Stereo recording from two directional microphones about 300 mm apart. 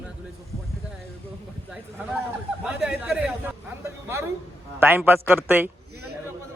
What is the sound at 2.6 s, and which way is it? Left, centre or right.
Speech, centre.